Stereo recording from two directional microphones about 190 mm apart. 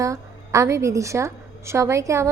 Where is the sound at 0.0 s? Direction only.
15° right (ahead or behind).